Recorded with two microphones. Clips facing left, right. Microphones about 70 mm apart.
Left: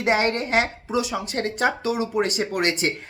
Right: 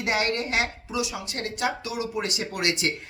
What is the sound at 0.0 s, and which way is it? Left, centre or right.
Speech, left.